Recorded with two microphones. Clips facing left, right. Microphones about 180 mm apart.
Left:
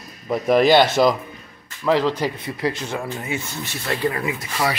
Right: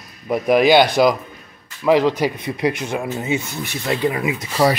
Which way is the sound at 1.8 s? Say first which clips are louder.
Right 4 dB; 15° right (ahead or behind).